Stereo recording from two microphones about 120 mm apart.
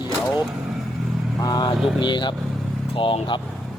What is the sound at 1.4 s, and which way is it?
Speech, 35° left (ahead or behind).